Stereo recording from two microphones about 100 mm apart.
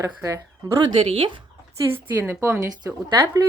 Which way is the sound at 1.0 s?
60° right (ahead or behind).